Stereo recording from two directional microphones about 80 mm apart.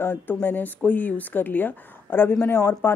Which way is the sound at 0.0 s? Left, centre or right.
Left.